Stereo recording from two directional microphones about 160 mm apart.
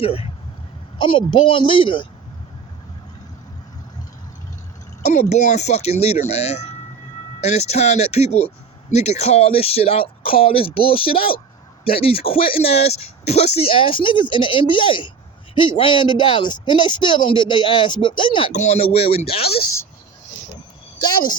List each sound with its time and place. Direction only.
0.0 s speech: 35° left (ahead or behind)
5.1 s speech: 50° left (ahead or behind); by 18.5 s 30° left (ahead or behind)
18.5 s speech: 45° left (ahead or behind)
21.0 s speech: 25° left (ahead or behind)